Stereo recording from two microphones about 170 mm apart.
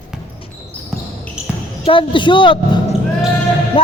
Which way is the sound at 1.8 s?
30° left (ahead or behind).